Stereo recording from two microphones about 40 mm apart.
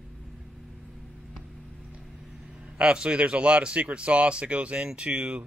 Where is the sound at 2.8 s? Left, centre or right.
Right.